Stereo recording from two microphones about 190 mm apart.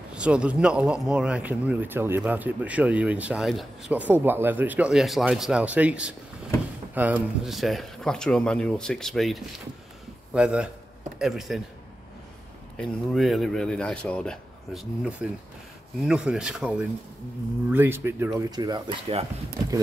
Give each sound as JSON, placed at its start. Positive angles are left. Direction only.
{"t": 0.1, "sound": "speech", "side_deg": -5}
{"t": 12.7, "sound": "speech", "side_deg": 0}